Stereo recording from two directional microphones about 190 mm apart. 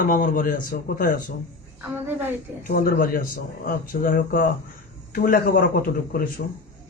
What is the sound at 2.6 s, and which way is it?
Speech, 50° left (ahead or behind).